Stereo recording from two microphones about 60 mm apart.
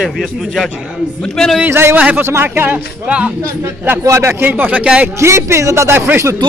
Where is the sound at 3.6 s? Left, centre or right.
Right.